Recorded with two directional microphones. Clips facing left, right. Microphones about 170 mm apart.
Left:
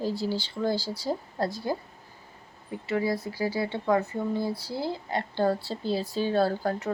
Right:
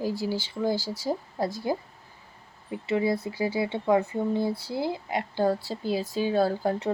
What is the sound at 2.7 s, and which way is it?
Speech, 20° right (ahead or behind).